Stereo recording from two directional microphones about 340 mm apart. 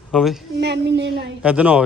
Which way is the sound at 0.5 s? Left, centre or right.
Right.